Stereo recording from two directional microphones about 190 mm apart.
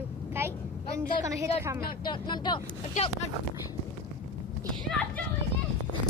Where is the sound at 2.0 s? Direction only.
25° left (ahead or behind).